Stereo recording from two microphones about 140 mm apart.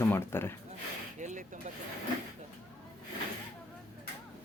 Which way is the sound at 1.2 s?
65° right (ahead or behind).